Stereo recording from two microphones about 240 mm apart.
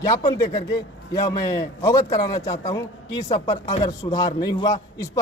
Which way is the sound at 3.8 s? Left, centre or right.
Centre.